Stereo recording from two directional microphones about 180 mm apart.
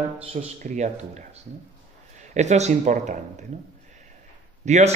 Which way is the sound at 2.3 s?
40° right (ahead or behind).